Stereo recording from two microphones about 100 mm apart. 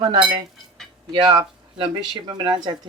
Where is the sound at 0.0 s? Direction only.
50° right (ahead or behind).